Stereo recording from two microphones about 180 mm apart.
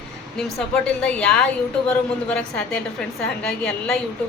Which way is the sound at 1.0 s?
5° left (ahead or behind).